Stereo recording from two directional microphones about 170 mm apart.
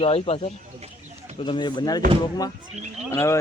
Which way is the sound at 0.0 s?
35° left (ahead or behind).